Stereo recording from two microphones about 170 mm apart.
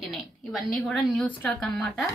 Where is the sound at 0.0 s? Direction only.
Centre (ahead or behind).